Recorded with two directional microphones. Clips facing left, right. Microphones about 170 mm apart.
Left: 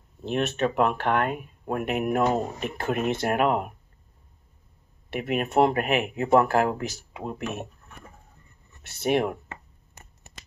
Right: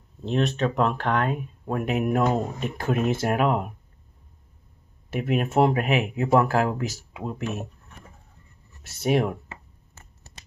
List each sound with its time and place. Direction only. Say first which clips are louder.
0.2 s speech: right 1 dB; 5° left (ahead or behind)
5.2 s speech: right 1 dB; centre (ahead or behind)
8.8 s speech: right 1 dB; centre (ahead or behind)
10.0 s a sound: left 1 dB; 15° left (ahead or behind)